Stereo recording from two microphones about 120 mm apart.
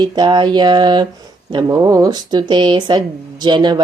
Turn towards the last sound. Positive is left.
turn(degrees=-40)  # may be behind; listen again after turning